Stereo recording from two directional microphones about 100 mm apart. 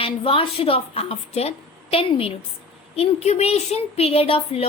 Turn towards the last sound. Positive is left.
turn(degrees=75)  # may be behind; listen again after turning